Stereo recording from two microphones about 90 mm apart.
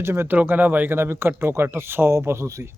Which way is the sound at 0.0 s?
25° right (ahead or behind).